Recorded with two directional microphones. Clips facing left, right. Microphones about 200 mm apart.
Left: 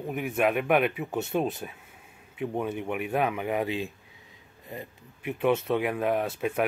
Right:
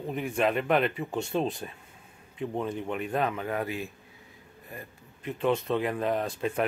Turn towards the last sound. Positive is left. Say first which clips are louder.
# left 1 dB
turn(degrees=5)  # may be behind; listen again after turning